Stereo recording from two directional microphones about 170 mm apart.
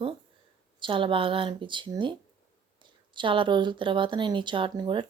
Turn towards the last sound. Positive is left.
turn(degrees=-25)  # may be behind; listen again after turning